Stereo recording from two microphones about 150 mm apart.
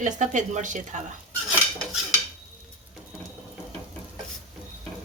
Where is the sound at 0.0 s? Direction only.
55° right (ahead or behind).